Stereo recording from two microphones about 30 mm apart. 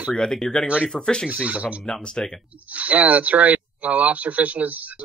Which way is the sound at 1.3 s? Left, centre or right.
Right.